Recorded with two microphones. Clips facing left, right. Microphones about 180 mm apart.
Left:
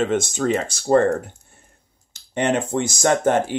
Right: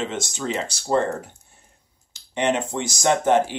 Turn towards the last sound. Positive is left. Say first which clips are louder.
# left 1 dB
turn(degrees=50)  # may be behind; listen again after turning